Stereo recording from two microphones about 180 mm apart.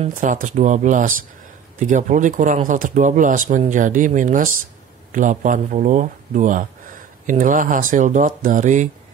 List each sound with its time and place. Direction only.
0.1 s speech: 45° right (ahead or behind)